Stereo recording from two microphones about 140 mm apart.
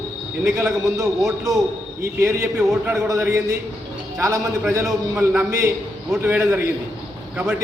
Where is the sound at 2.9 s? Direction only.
20° right (ahead or behind).